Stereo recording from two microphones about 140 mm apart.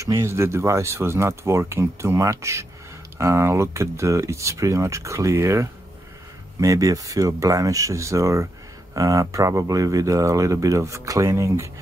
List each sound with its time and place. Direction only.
0.0 s speech: 20° right (ahead or behind)